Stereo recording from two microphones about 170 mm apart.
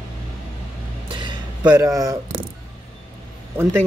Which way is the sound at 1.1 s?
25° right (ahead or behind).